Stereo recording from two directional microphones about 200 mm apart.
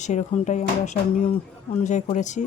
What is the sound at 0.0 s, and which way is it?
Speech, 35° left (ahead or behind).